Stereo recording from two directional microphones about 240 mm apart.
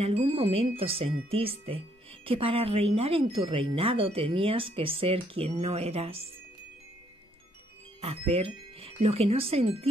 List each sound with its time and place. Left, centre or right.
0.0 s speech: right
8.0 s speech: right